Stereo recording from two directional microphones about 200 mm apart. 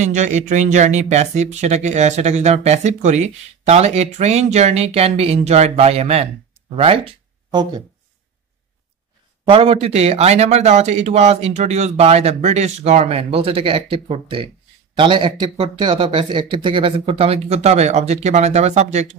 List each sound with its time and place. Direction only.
0.0 s speech: 35° right (ahead or behind)
9.5 s speech: 30° right (ahead or behind)